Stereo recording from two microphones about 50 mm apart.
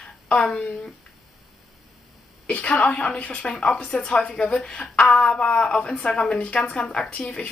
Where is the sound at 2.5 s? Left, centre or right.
Left.